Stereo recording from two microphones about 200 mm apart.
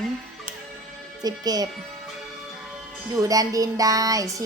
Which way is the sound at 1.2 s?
20° right (ahead or behind).